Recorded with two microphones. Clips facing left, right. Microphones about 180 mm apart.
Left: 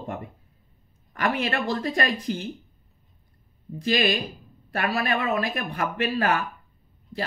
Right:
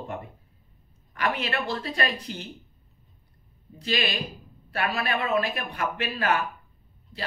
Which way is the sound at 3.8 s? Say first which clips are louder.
Left 5 dB; 45° left (ahead or behind).